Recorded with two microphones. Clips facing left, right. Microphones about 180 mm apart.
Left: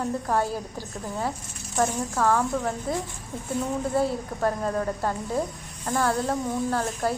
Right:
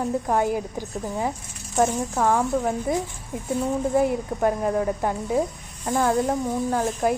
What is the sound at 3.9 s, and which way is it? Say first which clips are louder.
Speech: right 4 dB; 15° right (ahead or behind).